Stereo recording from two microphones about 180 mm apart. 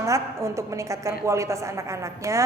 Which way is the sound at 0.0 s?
15° right (ahead or behind).